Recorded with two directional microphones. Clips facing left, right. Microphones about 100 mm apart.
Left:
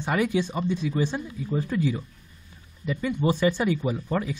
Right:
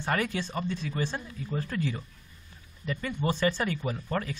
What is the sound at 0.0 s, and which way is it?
Speech, 10° left (ahead or behind).